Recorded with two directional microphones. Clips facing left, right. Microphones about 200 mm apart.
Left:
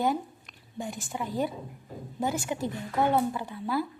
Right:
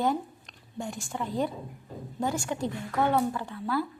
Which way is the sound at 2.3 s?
20° left (ahead or behind).